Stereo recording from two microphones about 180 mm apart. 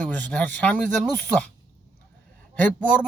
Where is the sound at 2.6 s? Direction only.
10° left (ahead or behind).